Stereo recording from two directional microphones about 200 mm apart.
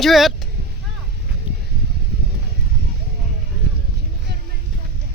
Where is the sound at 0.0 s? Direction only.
Centre (ahead or behind).